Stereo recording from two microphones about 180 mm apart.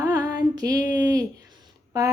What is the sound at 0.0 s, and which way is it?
Music, 20° right (ahead or behind).